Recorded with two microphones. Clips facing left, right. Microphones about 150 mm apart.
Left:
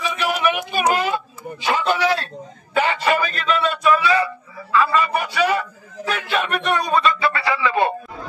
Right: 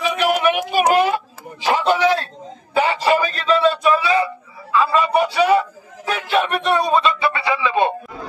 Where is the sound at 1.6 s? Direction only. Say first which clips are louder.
Right 3 dB; 25° right (ahead or behind).